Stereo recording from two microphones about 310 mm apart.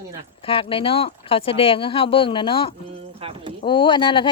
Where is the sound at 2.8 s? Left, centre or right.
Centre.